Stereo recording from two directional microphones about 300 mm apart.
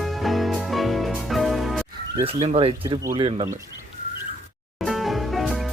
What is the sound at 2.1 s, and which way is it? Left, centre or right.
Speech, centre.